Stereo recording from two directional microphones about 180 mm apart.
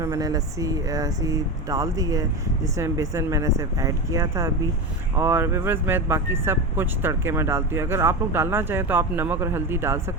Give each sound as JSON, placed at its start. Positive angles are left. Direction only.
{"t": 0.0, "sound": "speech", "side_deg": -20}